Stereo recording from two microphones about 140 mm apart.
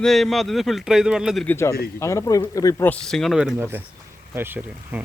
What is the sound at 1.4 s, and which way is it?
A man's voice, 20° left (ahead or behind).